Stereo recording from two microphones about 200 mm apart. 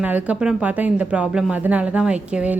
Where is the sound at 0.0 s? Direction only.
10° right (ahead or behind).